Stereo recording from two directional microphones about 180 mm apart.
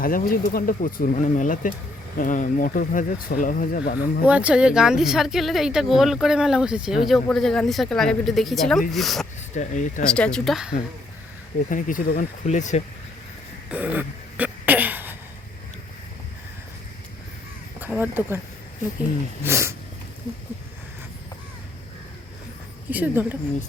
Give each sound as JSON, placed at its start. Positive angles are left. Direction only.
{"t": 0.0, "sound": "speech", "side_deg": 55}
{"t": 4.3, "sound": "speech", "side_deg": -5}
{"t": 9.6, "sound": "speech", "side_deg": 45}
{"t": 10.0, "sound": "speech", "side_deg": 5}
{"t": 11.7, "sound": "speech", "side_deg": 50}
{"t": 13.7, "sound": "throat clearing", "side_deg": -10}
{"t": 17.7, "sound": "crow", "side_deg": -10}
{"t": 19.4, "sound": "speech", "side_deg": -15}
{"t": 22.9, "sound": "speech", "side_deg": -10}